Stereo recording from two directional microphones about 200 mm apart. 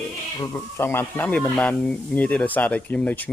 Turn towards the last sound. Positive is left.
turn(degrees=5)  # may be behind; listen again after turning